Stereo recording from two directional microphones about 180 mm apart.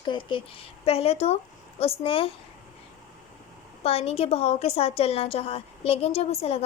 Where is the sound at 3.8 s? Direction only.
35° left (ahead or behind).